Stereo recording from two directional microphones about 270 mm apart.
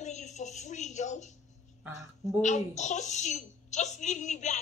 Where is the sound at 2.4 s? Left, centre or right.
Left.